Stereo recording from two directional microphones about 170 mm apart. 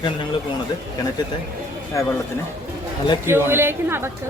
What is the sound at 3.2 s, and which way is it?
Speech, 15° right (ahead or behind).